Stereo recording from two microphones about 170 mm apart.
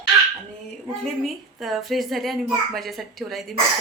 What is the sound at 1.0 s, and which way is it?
A child's voice, centre (ahead or behind).